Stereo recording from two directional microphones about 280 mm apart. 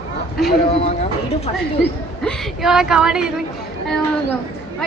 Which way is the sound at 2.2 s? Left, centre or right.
Centre.